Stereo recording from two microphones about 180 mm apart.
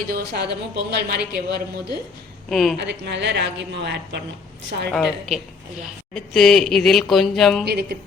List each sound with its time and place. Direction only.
0.1 s speech: 65° right (ahead or behind)
2.5 s speech: centre (ahead or behind)
2.8 s a woman's voice: 75° right (ahead or behind)
4.9 s speech: centre (ahead or behind)
7.6 s speech: 65° right (ahead or behind)